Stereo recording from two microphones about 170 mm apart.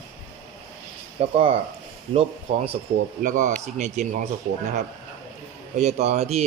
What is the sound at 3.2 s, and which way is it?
Speech, 45° right (ahead or behind).